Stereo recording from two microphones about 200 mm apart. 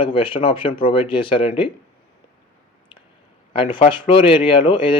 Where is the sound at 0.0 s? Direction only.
25° left (ahead or behind).